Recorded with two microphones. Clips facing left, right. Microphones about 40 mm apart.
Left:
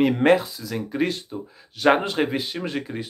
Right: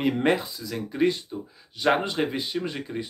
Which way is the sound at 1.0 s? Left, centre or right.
Left.